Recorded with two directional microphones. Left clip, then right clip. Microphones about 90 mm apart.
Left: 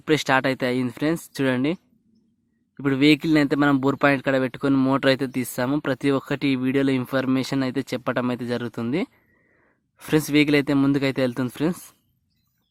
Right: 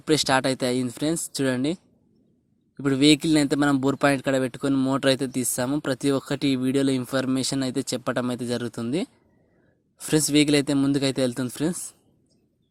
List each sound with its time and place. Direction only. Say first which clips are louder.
0.0 s speech: left 1 dB; 30° right (ahead or behind)
4.7 s speech: left 4 dB; 5° right (ahead or behind)
4.9 s speech: left 2 dB; 30° right (ahead or behind)
10.0 s speech: left 1 dB; 25° right (ahead or behind)